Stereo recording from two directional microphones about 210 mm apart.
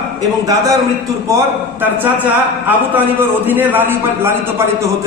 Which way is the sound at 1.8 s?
10° right (ahead or behind).